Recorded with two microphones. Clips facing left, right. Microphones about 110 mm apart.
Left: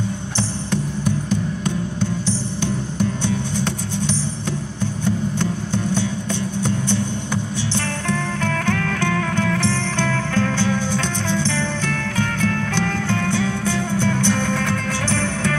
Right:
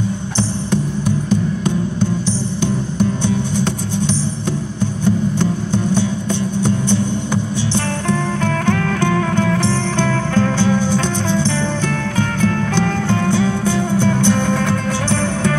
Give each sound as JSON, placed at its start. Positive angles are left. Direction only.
{"t": 3.3, "sound": "music", "side_deg": -15}
{"t": 7.7, "sound": "music", "side_deg": -20}